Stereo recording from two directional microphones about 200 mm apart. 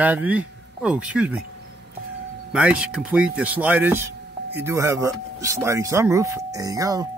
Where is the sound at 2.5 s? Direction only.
5° right (ahead or behind).